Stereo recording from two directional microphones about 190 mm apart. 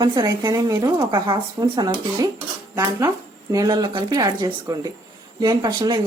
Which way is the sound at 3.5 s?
20° right (ahead or behind).